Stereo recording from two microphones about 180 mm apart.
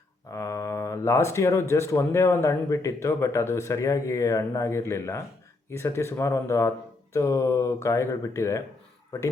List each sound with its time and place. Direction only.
0.3 s speech: 15° left (ahead or behind)